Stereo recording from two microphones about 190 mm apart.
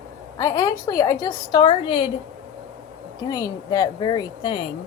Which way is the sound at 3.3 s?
20° left (ahead or behind).